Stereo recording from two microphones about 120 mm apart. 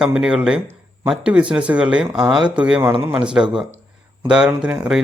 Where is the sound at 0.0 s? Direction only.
5° right (ahead or behind).